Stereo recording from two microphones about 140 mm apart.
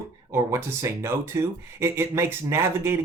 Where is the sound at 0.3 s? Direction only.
20° right (ahead or behind).